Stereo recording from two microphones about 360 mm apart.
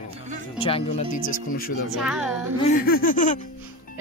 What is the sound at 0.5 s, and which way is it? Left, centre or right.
Speech, centre.